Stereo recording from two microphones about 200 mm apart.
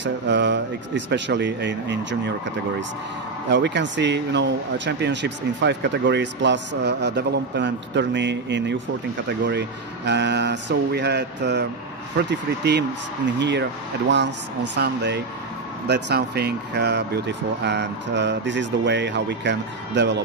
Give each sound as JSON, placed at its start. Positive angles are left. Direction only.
{"t": 0.0, "sound": "speech", "side_deg": -60}
{"t": 3.4, "sound": "speech", "side_deg": -60}